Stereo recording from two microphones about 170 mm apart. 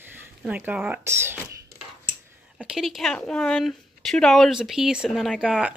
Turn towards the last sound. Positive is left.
turn(degrees=-5)  # may be behind; listen again after turning